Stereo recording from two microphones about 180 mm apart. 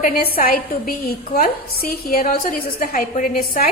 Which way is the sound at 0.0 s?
55° left (ahead or behind).